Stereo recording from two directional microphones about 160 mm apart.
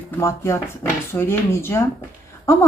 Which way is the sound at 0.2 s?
15° left (ahead or behind).